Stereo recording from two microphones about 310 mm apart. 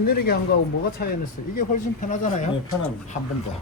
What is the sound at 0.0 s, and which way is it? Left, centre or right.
Speech, left.